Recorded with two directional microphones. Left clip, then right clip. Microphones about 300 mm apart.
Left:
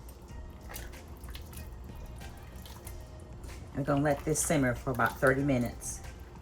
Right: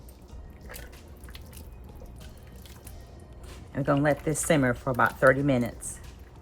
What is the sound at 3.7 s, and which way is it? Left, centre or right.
Speech, centre.